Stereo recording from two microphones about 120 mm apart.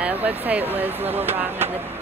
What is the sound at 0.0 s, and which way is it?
Speech, 15° right (ahead or behind).